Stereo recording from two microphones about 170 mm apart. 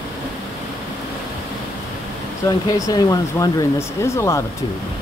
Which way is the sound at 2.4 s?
20° left (ahead or behind).